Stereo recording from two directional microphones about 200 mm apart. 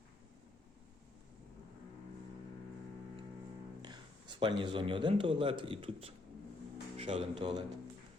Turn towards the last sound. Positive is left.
turn(degrees=-20)  # may be behind; listen again after turning